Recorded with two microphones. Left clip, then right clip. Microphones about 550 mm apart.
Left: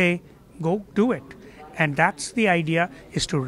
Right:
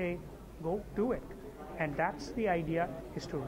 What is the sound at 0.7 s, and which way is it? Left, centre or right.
A man's voice, left.